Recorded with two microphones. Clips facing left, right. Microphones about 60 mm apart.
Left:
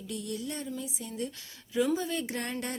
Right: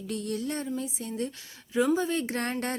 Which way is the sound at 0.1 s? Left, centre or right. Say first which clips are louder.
Right 5 dB; right.